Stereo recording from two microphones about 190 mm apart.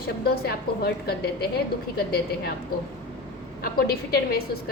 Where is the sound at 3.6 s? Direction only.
55° left (ahead or behind).